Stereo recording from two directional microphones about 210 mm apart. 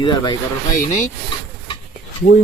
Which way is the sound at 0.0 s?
20° left (ahead or behind).